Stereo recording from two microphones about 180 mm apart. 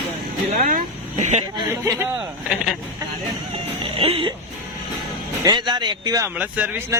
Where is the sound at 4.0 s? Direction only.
30° right (ahead or behind).